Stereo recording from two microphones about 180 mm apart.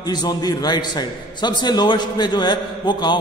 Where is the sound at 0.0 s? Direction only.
20° left (ahead or behind).